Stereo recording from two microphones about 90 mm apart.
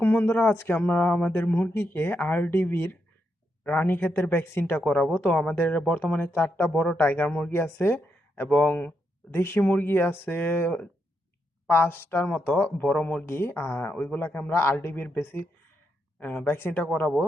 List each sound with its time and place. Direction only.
0.0 s speech: 25° left (ahead or behind)
4.8 s speech: 5° left (ahead or behind)
5.2 s speech: 15° left (ahead or behind)
7.5 s speech: 25° left (ahead or behind)
16.2 s speech: 10° left (ahead or behind)
16.5 s speech: 25° left (ahead or behind)
16.7 s speech: 15° left (ahead or behind)